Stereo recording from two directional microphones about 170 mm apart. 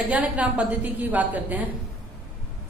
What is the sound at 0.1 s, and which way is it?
A woman's voice, 10° right (ahead or behind).